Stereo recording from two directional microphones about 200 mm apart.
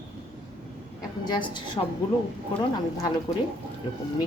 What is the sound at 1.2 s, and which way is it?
Speech, 20° left (ahead or behind).